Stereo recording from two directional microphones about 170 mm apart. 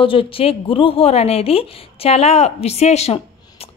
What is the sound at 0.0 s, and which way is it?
A woman's voice, 30° left (ahead or behind).